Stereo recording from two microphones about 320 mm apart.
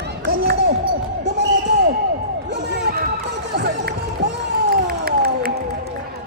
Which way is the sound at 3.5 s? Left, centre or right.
Right.